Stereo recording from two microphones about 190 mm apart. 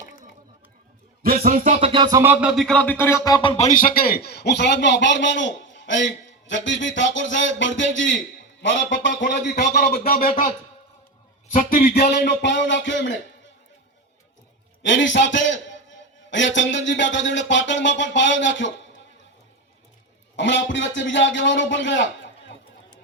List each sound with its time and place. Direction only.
1.2 s speech: 50° right (ahead or behind)
1.9 s music: 20° right (ahead or behind); by 8.2 s 80° left
8.6 s a man's voice: 75° left (ahead or behind); by 10.5 s 45° left (ahead or behind)
11.5 s music: 50° left (ahead or behind); by 13.1 s 70° left (ahead or behind)
14.8 s music: 75° left (ahead or behind)
20.3 s a man's voice: 75° left (ahead or behind)
20.7 s music: 75° left (ahead or behind)